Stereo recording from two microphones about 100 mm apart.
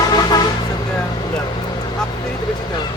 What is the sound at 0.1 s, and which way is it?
Music, 40° left (ahead or behind).